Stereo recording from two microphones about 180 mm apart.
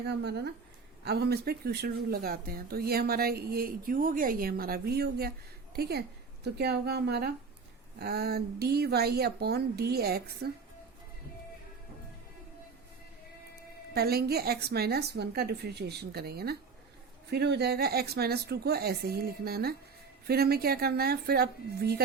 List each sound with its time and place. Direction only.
0.1 s speech: 65° right (ahead or behind)
13.9 s speech: 60° right (ahead or behind)